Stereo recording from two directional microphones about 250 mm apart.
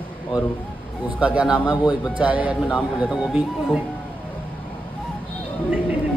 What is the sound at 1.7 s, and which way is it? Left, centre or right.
Speech, centre.